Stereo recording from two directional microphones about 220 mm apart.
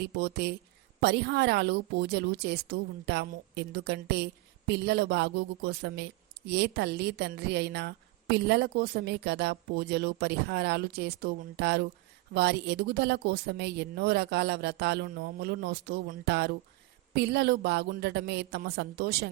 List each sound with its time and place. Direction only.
0.0 s a woman's voice: 50° right (ahead or behind)